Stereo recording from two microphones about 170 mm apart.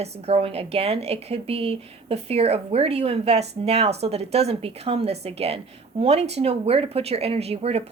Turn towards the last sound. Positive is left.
turn(degrees=-35)  # may be behind; listen again after turning